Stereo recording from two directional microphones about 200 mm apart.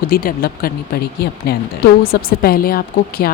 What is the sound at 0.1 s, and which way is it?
Speech, 45° left (ahead or behind).